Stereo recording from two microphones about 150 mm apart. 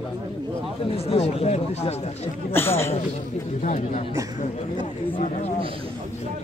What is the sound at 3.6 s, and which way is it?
Speech, 60° left (ahead or behind).